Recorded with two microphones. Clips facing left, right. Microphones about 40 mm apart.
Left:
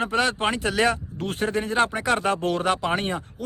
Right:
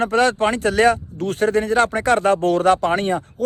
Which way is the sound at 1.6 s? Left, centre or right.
Centre.